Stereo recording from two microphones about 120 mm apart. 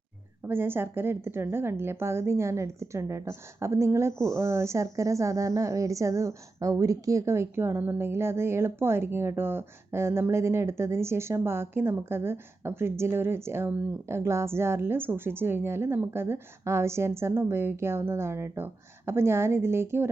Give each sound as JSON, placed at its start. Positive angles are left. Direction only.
{"t": 0.4, "sound": "speech", "side_deg": -15}